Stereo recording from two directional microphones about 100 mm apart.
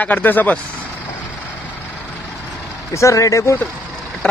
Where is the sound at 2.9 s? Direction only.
35° left (ahead or behind).